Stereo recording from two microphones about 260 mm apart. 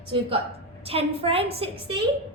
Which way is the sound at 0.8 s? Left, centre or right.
Right.